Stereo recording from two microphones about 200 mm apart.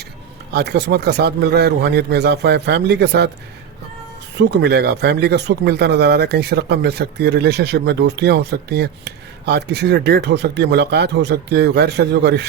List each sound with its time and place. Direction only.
0.5 s speech: 55° right (ahead or behind)
4.4 s speech: 55° right (ahead or behind)